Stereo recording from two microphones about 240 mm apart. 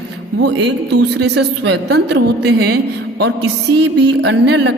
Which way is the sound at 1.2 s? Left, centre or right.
Right.